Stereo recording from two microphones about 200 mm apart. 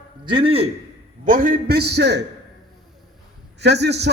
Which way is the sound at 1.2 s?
40° right (ahead or behind).